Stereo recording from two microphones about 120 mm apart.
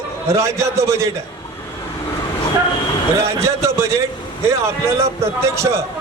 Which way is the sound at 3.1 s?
25° right (ahead or behind).